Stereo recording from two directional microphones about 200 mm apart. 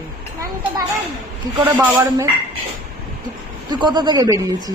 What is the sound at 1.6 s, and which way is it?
Speech, 10° right (ahead or behind).